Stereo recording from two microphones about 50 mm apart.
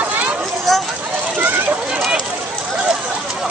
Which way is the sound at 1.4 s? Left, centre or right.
Right.